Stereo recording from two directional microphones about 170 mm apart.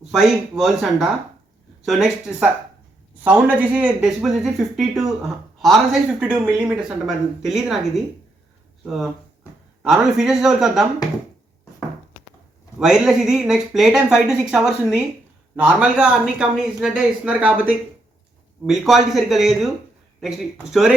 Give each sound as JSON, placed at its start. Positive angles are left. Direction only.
{"t": 0.1, "sound": "a woman's voice", "side_deg": 0}
{"t": 12.8, "sound": "a woman's voice", "side_deg": -5}